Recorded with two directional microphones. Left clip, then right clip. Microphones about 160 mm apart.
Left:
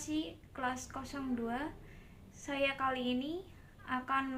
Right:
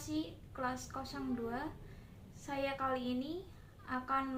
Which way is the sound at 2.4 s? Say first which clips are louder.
Left 3 dB; 25° left (ahead or behind).